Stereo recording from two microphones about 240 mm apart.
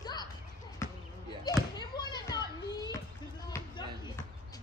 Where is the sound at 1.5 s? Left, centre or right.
Centre.